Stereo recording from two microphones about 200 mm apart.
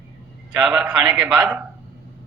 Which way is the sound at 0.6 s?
5° right (ahead or behind).